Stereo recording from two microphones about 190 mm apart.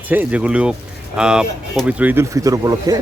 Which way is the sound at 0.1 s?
10° right (ahead or behind).